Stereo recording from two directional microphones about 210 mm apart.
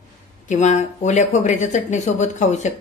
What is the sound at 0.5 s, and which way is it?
Speech, 35° left (ahead or behind).